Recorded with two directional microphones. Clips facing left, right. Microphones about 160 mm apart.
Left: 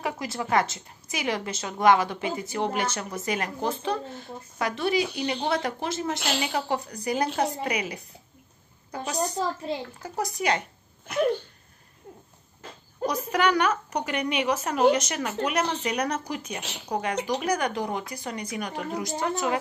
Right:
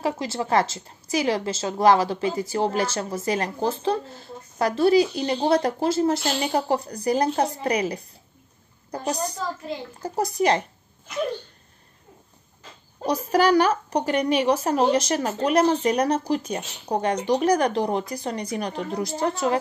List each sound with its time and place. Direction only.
0.0 s a woman's voice: 30° right (ahead or behind)
13.0 s a woman's voice: 35° right (ahead or behind)